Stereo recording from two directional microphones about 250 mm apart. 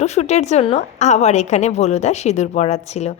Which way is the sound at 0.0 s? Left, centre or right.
Left.